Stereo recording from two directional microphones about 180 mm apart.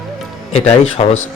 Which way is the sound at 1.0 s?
30° left (ahead or behind).